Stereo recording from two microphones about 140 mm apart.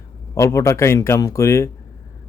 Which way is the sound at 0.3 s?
20° left (ahead or behind).